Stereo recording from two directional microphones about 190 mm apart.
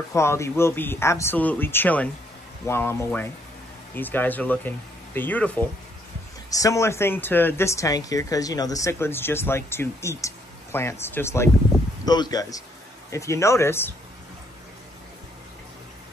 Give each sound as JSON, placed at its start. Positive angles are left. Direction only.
{"t": 0.1, "sound": "speech", "side_deg": 15}